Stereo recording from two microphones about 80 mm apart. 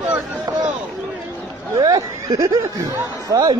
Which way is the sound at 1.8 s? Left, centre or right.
Right.